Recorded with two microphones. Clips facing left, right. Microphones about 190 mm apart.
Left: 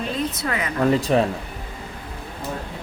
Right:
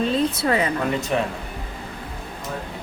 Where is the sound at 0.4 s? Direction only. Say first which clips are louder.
Right 5 dB; 30° right (ahead or behind).